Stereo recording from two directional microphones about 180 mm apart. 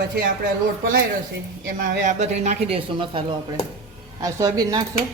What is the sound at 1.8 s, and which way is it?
Speech, 50° right (ahead or behind).